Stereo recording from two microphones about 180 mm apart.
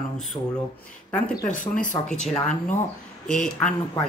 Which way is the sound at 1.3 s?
45° left (ahead or behind).